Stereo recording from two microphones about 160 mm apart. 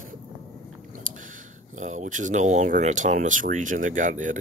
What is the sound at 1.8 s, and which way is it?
Speech, 50° right (ahead or behind).